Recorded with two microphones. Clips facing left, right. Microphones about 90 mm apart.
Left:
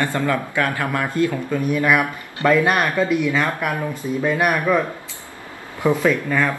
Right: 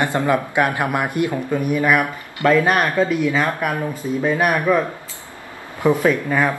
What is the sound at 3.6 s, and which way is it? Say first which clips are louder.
Speech: right 1 dB; 10° right (ahead or behind).